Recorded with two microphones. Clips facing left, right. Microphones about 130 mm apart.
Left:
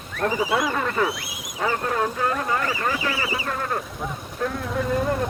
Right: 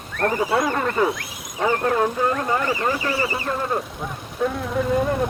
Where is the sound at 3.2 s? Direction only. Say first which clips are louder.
Right 2 dB; 10° left (ahead or behind).